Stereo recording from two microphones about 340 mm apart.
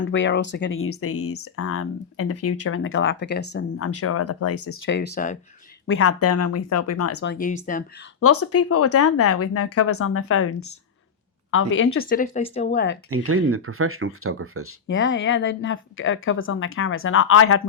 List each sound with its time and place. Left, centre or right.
0.0 s speech: left
5.8 s speech: left
7.2 s speech: left
8.2 s speech: left
12.0 s speech: left
13.1 s speech: right
14.8 s speech: left